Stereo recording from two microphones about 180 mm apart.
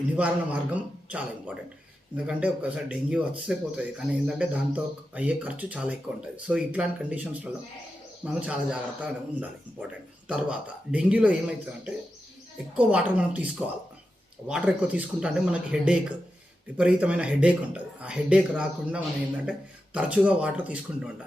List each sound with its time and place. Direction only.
0.2 s speech: 10° right (ahead or behind)
8.2 s speech: 5° right (ahead or behind)
12.7 s speech: 5° right (ahead or behind)